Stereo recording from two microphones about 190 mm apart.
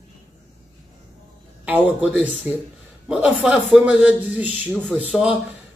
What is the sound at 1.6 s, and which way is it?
A man's voice, 10° right (ahead or behind).